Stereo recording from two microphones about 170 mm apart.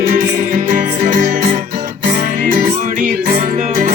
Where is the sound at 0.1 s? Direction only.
50° right (ahead or behind).